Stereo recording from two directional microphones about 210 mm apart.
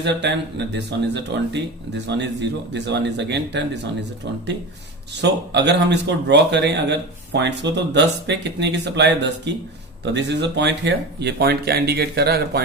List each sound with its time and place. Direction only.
0.0 s speech: 55° right (ahead or behind)
5.2 s speech: 55° right (ahead or behind)